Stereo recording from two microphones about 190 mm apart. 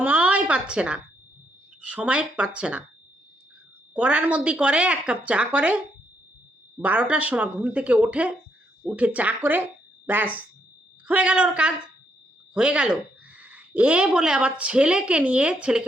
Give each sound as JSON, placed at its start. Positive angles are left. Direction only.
{"t": 0.0, "sound": "a sound", "side_deg": -10}
{"t": 1.9, "sound": "a woman's voice", "side_deg": -5}
{"t": 3.9, "sound": "a woman's voice", "side_deg": -5}